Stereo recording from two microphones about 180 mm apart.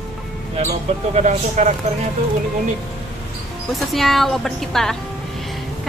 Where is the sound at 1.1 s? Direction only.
40° right (ahead or behind).